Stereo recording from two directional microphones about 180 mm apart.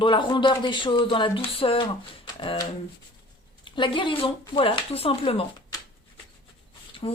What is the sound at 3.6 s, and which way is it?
Speech, 25° left (ahead or behind).